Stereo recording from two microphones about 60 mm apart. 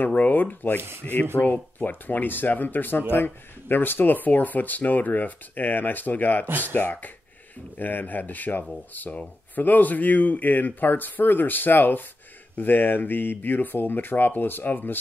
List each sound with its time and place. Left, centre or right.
0.0 s speech: left
0.7 s speech: right
1.4 s speech: left